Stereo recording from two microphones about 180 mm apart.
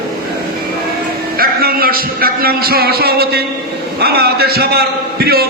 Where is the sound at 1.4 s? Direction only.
55° right (ahead or behind).